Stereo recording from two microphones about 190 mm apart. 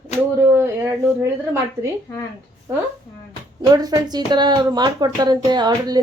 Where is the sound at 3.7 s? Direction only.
20° right (ahead or behind).